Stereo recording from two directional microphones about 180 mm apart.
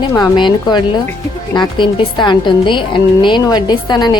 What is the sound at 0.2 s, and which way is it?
A woman's voice, 25° left (ahead or behind).